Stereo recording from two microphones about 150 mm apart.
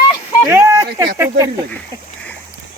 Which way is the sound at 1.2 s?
20° right (ahead or behind).